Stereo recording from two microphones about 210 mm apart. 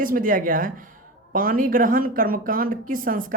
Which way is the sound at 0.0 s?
40° right (ahead or behind).